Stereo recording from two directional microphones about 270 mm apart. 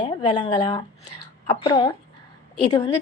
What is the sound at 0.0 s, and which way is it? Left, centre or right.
A woman's voice, centre.